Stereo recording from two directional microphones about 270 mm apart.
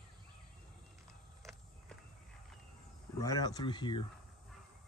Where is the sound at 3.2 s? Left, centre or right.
Centre.